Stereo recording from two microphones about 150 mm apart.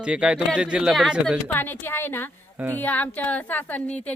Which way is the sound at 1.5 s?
15° left (ahead or behind).